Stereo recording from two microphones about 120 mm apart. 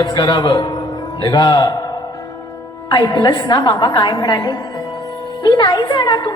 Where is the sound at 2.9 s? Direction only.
35° left (ahead or behind).